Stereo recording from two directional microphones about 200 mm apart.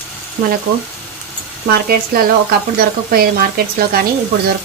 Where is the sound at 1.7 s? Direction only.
50° right (ahead or behind).